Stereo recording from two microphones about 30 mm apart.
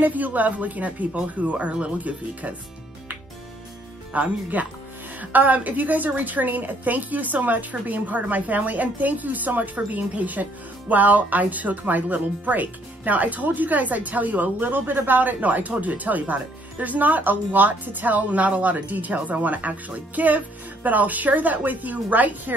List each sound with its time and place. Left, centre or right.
0.0 s speech: right
4.1 s speech: right